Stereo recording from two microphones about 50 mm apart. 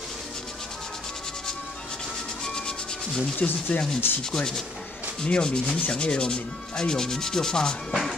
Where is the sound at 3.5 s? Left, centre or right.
Left.